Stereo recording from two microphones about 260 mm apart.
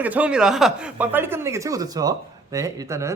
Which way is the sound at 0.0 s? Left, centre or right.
Centre.